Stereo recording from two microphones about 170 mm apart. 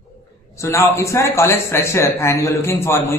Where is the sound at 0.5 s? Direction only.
15° left (ahead or behind).